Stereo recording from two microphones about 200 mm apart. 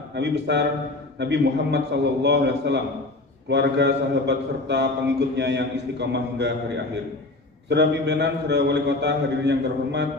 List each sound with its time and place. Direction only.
0.1 s a man's voice: 60° right (ahead or behind)
7.7 s a man's voice: 60° right (ahead or behind)